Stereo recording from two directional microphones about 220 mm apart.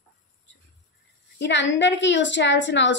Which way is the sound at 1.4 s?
55° left (ahead or behind).